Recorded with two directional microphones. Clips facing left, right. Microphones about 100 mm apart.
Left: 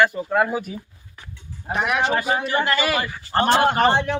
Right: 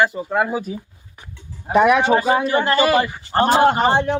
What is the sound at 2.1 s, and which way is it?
Speech, 30° right (ahead or behind).